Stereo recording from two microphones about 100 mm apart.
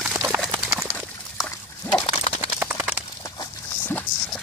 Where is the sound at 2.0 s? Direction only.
90° left.